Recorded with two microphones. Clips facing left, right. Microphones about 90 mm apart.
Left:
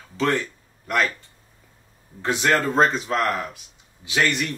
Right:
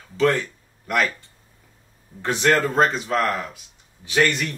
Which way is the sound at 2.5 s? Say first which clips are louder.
Left 1 dB; centre (ahead or behind).